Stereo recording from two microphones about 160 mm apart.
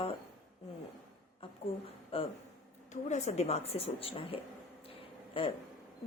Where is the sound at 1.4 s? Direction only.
35° left (ahead or behind).